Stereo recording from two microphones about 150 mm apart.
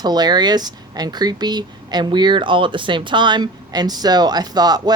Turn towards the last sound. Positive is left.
turn(degrees=-25)  # may be behind; listen again after turning